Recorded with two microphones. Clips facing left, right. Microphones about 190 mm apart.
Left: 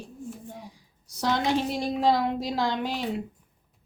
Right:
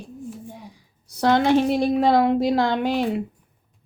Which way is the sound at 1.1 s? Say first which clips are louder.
Right 8 dB; 60° right (ahead or behind).